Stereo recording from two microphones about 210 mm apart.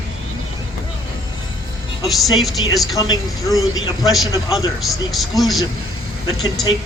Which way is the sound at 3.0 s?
15° left (ahead or behind).